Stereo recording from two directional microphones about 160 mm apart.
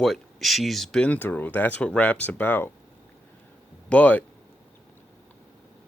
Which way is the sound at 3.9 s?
10° left (ahead or behind).